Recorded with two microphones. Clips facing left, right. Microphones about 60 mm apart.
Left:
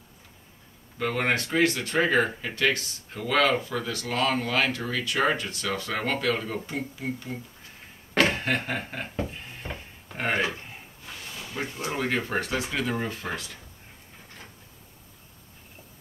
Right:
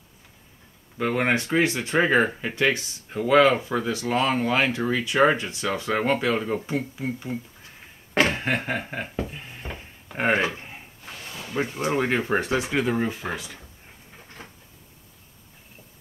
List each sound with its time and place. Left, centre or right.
0.9 s speech: centre
9.3 s a sound: centre
10.1 s speech: right; by 13.6 s centre